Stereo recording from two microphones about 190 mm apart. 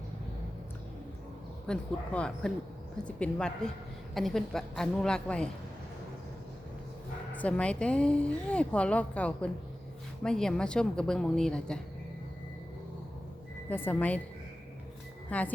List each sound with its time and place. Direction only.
1.6 s a woman's voice: 5° left (ahead or behind)
7.3 s a woman's voice: 5° left (ahead or behind)
13.7 s a woman's voice: 10° left (ahead or behind)
15.3 s a woman's voice: 5° left (ahead or behind)